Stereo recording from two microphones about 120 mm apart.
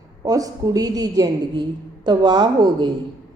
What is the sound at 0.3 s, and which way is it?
A woman's voice, 30° right (ahead or behind).